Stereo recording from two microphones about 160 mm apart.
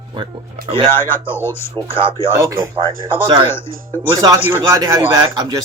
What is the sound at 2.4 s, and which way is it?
Speech, 15° right (ahead or behind).